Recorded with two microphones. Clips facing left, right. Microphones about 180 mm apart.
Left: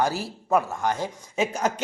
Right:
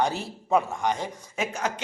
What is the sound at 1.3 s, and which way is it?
Speech, 35° left (ahead or behind).